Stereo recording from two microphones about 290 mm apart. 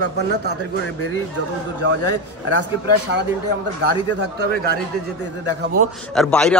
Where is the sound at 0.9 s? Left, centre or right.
Left.